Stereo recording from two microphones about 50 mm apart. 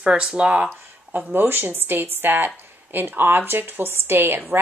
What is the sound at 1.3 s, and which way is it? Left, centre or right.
Speech, right.